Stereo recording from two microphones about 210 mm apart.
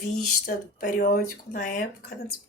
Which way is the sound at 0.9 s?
45° left (ahead or behind).